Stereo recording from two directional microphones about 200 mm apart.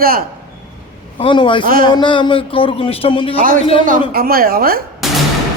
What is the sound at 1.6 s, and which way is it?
Speech, 45° right (ahead or behind).